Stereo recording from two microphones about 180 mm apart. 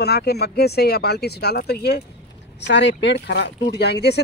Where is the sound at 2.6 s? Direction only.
75° left (ahead or behind).